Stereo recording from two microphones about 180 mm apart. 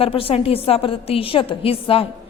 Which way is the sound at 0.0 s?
30° left (ahead or behind).